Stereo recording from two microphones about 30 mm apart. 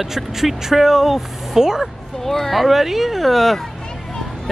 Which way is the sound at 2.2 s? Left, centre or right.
Centre.